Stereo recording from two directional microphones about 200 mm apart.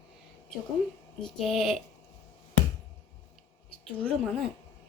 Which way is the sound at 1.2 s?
Centre (ahead or behind).